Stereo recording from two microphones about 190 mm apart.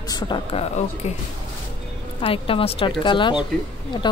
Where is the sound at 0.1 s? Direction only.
25° left (ahead or behind).